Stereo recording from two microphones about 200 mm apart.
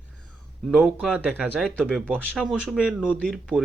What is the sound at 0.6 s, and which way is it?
Speech, centre (ahead or behind).